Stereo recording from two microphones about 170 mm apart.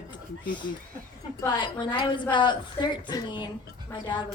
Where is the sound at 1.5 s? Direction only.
25° left (ahead or behind).